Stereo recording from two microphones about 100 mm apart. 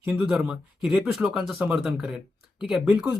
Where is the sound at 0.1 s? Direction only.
5° right (ahead or behind).